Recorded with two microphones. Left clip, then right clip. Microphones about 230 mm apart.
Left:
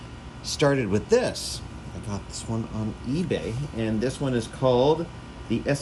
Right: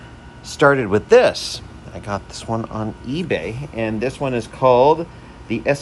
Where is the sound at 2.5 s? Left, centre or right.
Right.